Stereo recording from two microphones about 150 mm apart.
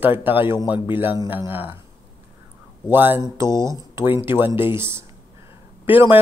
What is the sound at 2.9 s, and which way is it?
A man's voice, 15° right (ahead or behind).